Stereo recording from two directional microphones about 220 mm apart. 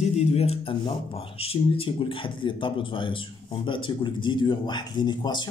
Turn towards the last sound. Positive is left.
turn(degrees=20)  # may be behind; listen again after turning